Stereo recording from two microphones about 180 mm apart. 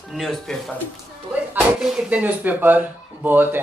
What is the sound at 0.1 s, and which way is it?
Speech, centre (ahead or behind).